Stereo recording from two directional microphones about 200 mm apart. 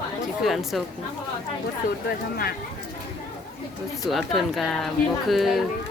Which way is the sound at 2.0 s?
50° left (ahead or behind).